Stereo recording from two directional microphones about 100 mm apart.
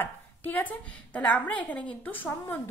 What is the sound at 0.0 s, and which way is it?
A woman's voice, 15° left (ahead or behind).